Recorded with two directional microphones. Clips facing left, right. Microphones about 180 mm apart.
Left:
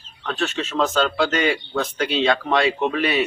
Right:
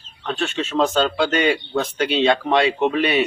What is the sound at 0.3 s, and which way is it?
Speech, 25° right (ahead or behind).